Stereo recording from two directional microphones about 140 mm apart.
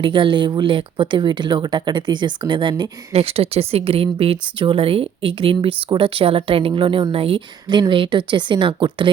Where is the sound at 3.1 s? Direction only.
45° right (ahead or behind).